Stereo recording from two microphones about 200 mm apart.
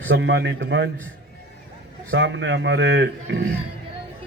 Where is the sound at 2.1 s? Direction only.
65° right (ahead or behind).